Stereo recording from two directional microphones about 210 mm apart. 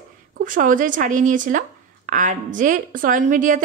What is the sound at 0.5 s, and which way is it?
A woman's voice, 40° right (ahead or behind).